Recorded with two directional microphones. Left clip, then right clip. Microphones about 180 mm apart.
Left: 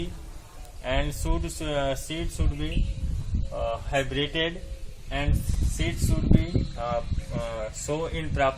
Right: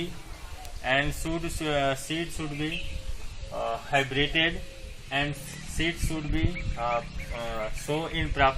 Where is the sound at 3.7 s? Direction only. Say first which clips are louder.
Right 2 dB; 55° left (ahead or behind).